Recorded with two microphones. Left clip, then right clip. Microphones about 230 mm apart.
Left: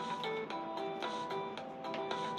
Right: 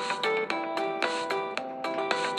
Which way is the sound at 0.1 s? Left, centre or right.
Right.